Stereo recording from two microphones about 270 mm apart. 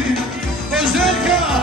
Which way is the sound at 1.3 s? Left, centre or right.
Centre.